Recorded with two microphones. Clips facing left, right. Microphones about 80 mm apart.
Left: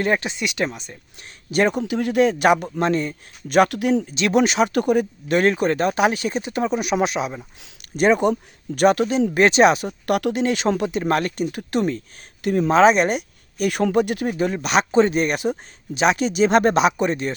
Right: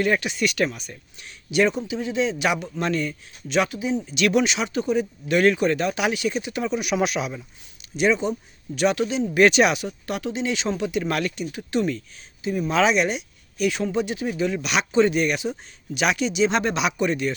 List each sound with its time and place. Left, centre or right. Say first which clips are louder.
0.0 s speech: even; left
1.2 s speech: left 1 dB; left
1.7 s speech: left 5 dB; left
3.7 s speech: left 6 dB; left
4.1 s speech: left 2 dB; left
4.7 s speech: left 4 dB; left
5.3 s speech: left 1 dB; left
7.9 s speech: left 4 dB; left
9.3 s speech: left 2 dB; left
10.1 s speech: left 7 dB; left
12.4 s speech: left 6 dB; left
12.7 s speech: left 5 dB; left